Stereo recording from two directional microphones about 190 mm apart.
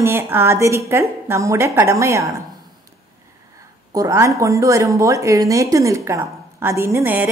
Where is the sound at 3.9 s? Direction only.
15° right (ahead or behind).